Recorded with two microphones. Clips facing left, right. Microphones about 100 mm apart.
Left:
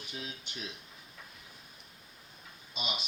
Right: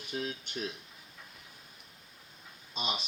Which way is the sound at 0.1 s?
45° right (ahead or behind).